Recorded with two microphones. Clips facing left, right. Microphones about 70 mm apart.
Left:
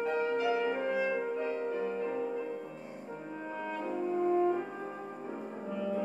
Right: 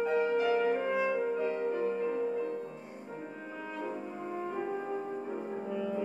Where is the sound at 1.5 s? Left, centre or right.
Right.